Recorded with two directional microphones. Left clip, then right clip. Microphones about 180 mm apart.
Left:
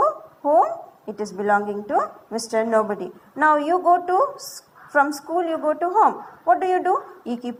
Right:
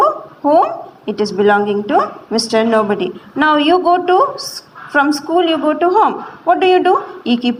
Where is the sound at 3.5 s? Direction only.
5° left (ahead or behind).